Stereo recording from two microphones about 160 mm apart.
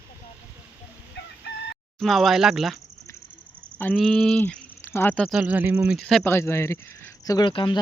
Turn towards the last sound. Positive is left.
turn(degrees=30)  # may be behind; listen again after turning